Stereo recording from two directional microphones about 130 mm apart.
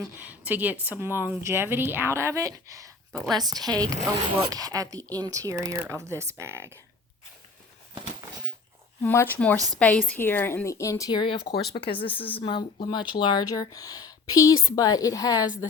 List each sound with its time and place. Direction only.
0.2 s a woman's voice: 15° right (ahead or behind)
3.1 s a woman's voice: 5° left (ahead or behind)
3.3 s speech: 30° right (ahead or behind)
9.0 s a woman's voice: 15° left (ahead or behind)